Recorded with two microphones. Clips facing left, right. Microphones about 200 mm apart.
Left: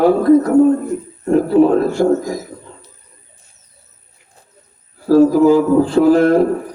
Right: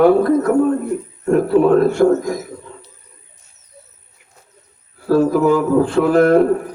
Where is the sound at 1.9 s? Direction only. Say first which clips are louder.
Right 1 dB; 35° left (ahead or behind).